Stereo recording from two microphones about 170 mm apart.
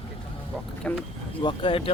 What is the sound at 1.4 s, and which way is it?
Speech, 30° left (ahead or behind).